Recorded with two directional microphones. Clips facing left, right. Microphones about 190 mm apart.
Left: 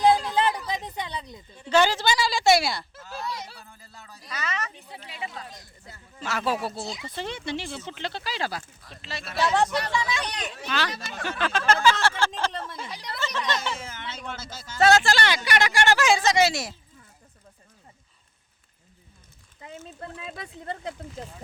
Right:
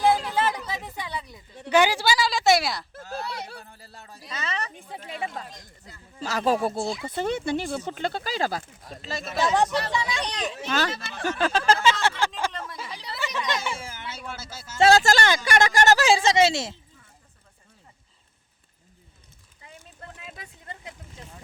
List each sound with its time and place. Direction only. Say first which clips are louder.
0.7 s a woman's voice: left 1 dB; 20° left (ahead or behind)
1.7 s a woman's voice: right 1 dB; 15° right (ahead or behind)
2.1 s a woman's voice: left 2 dB; centre (ahead or behind)
3.3 s speech: right 2 dB; 55° right (ahead or behind)
3.7 s speech: right 2 dB; 35° right (ahead or behind)
4.7 s speech: right 6 dB; 50° right (ahead or behind)
6.1 s speech: right 4 dB; 35° right (ahead or behind)
9.6 s speech: right 1 dB; 15° left (ahead or behind)
9.9 s speech: even; 25° right (ahead or behind)
12.5 s a sound: left 1 dB; 30° left (ahead or behind)
13.1 s speech: even; 15° right (ahead or behind)
14.8 s speech: right 1 dB; 30° right (ahead or behind)
15.0 s speech: right 3 dB; 45° right (ahead or behind); by 16.7 s 25° right (ahead or behind)
20.3 s speech: left 8 dB; 35° left (ahead or behind)